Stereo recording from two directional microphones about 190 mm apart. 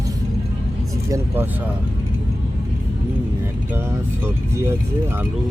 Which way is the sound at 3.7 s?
10° right (ahead or behind).